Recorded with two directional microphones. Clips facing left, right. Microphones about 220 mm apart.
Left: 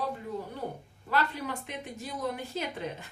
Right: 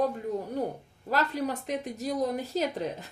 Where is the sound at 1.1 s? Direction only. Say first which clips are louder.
Right 3 dB; 40° right (ahead or behind).